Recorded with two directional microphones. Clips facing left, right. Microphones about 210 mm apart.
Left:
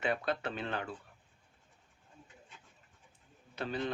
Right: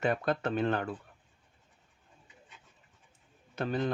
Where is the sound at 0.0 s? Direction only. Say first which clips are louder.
Right 4 dB; 45° right (ahead or behind).